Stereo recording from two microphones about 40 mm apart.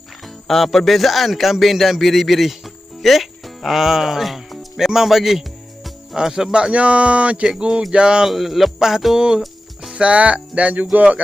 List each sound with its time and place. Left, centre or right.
0.4 s speech: centre
6.1 s speech: centre
6.5 s speech: right
7.7 s speech: centre
7.9 s a sound: right
8.3 s music: centre
9.1 s a sound: right
9.9 s speech: right